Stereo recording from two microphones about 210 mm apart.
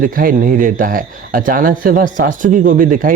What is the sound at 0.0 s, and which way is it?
Speech, 40° right (ahead or behind).